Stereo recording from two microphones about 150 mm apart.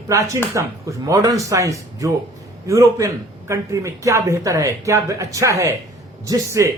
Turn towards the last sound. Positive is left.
turn(degrees=-20)  # may be behind; listen again after turning